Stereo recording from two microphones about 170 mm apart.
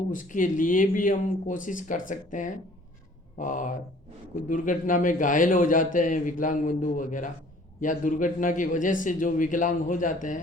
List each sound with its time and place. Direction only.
0.1 s a man's voice: 50° left (ahead or behind)